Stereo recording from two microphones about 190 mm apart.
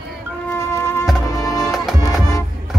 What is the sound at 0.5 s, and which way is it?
Music, 15° left (ahead or behind).